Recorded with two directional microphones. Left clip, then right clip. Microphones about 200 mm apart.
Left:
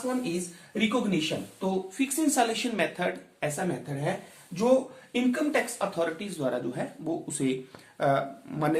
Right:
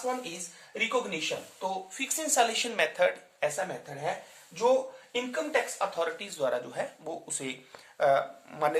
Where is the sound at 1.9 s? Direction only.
30° right (ahead or behind).